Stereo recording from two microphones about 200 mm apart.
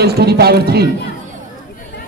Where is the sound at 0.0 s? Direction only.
55° right (ahead or behind).